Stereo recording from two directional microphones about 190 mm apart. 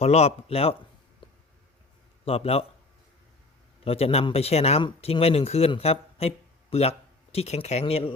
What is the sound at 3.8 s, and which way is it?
Speech, 30° left (ahead or behind).